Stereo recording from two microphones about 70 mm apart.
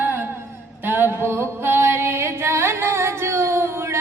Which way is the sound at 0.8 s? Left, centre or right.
Right.